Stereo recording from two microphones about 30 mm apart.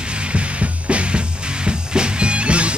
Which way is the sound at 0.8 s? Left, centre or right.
Right.